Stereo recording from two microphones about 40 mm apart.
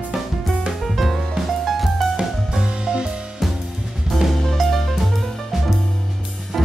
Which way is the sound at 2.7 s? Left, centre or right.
Right.